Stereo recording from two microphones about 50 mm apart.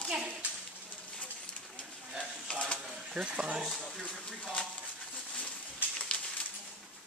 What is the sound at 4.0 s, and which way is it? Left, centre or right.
Speech, centre.